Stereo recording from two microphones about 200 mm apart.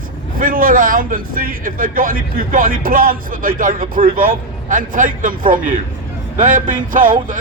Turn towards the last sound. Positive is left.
turn(degrees=-45)  # may be behind; listen again after turning